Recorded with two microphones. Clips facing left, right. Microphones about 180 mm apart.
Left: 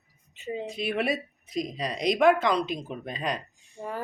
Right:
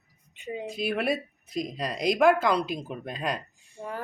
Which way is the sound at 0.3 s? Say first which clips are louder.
Left 1 dB; 10° right (ahead or behind).